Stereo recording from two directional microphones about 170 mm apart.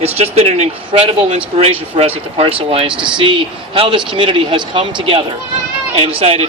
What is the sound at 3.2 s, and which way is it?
A man's voice, 30° right (ahead or behind).